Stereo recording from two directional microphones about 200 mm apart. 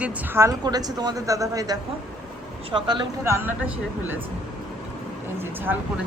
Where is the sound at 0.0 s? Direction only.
15° right (ahead or behind).